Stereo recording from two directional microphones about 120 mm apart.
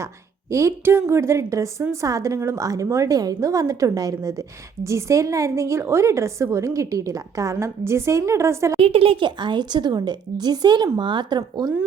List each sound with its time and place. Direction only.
0.5 s a woman's voice: 20° right (ahead or behind)
8.8 s a woman's voice: 50° right (ahead or behind); by 11.7 s 35° right (ahead or behind)